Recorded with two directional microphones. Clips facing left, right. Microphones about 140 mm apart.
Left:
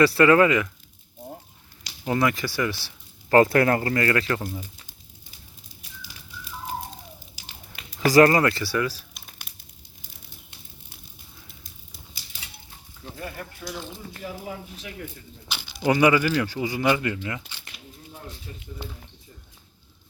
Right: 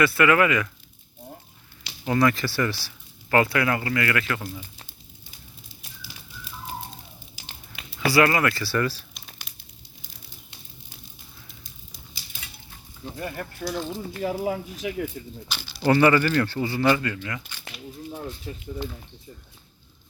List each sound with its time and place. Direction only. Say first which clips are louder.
0.0 s speech: left 3 dB; 35° left (ahead or behind)
2.0 s speech: right 2 dB; 20° left (ahead or behind)
3.2 s speech: left 4 dB; 40° left (ahead or behind)
7.8 s speech: left 4 dB; 40° left (ahead or behind); by 8.7 s 25° left (ahead or behind)
8.7 s crumpling: right 1 dB; 5° left (ahead or behind)
13.1 s speech: right 3 dB; 30° right (ahead or behind)
14.2 s speech: right 9 dB; 70° right (ahead or behind)
15.4 s speech: right 1 dB; 15° left (ahead or behind)
18.5 s speech: right 6 dB; 45° right (ahead or behind)